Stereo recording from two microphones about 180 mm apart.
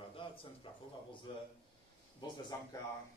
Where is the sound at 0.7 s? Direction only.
30° left (ahead or behind).